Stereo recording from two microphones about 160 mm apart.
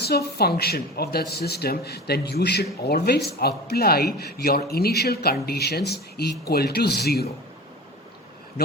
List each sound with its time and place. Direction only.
0.0 s speech: 85° left
6.4 s speech: 75° left (ahead or behind)
8.6 s speech: 85° left